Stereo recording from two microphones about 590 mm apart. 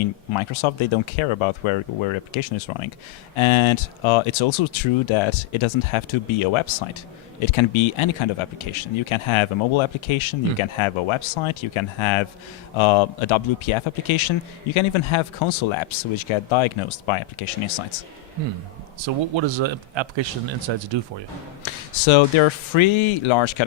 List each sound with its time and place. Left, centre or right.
0.0 s speech: left
19.0 s speech: right
21.6 s speech: left